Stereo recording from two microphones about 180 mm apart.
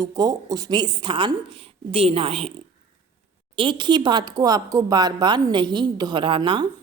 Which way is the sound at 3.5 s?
25° right (ahead or behind).